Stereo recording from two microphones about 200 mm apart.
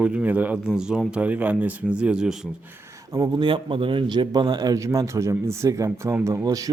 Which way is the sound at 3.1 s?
20° right (ahead or behind).